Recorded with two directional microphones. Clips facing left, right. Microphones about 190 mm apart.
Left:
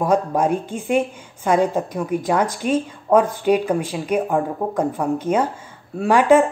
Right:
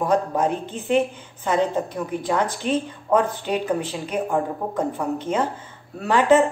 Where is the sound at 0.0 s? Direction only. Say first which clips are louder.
Left 2 dB; 10° left (ahead or behind).